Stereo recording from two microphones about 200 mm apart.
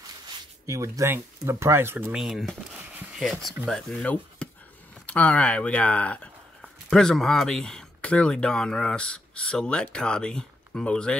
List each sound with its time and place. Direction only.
0.7 s speech: 15° right (ahead or behind); by 11.1 s 5° left (ahead or behind)